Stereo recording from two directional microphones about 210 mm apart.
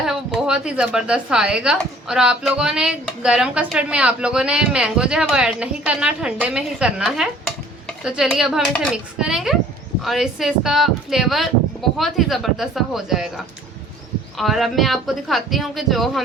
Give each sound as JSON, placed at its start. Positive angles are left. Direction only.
{"t": 0.0, "sound": "a woman's voice", "side_deg": 0}